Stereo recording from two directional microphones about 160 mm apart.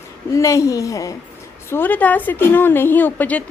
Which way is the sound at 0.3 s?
20° left (ahead or behind).